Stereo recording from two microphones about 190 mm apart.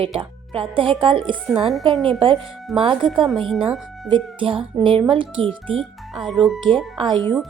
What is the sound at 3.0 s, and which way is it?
Speech, centre (ahead or behind).